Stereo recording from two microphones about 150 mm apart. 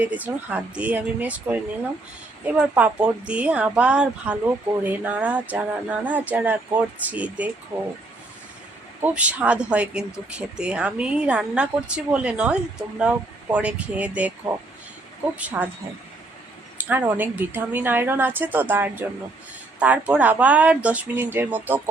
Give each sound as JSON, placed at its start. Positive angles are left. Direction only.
{"t": 0.0, "sound": "speech", "side_deg": -10}
{"t": 7.7, "sound": "speech", "side_deg": -20}
{"t": 9.0, "sound": "speech", "side_deg": -10}
{"t": 16.7, "sound": "speech", "side_deg": -10}